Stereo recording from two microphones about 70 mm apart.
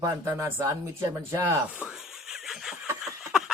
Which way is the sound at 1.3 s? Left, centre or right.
Right.